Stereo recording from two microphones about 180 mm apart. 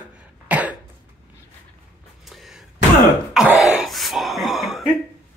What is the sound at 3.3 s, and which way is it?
Throat clearing, 5° right (ahead or behind).